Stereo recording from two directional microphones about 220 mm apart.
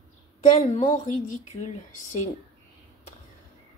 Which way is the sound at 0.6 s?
35° left (ahead or behind).